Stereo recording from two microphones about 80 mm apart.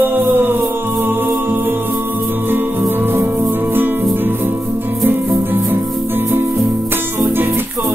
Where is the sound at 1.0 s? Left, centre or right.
Right.